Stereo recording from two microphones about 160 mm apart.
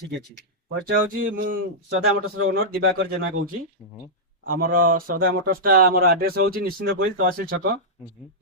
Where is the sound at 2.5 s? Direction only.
75° right (ahead or behind).